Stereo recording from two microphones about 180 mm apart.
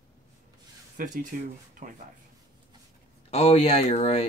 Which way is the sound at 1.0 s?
45° right (ahead or behind).